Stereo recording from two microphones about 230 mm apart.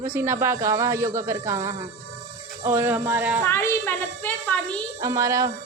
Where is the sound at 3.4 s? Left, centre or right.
Centre.